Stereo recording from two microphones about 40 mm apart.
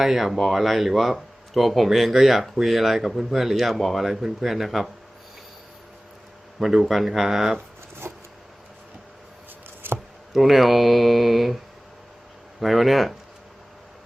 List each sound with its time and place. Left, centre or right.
0.0 s speech: centre
6.6 s speech: centre
9.8 s a sound: right
10.3 s speech: centre